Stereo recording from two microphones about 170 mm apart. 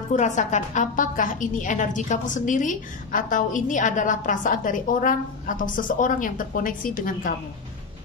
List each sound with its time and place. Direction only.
0.1 s a woman's voice: 45° left (ahead or behind)